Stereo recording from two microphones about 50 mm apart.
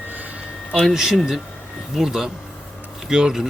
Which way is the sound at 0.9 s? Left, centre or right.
Centre.